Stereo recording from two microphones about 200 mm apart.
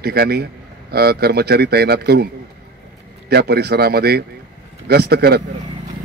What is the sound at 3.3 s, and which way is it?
A man's voice, 55° right (ahead or behind).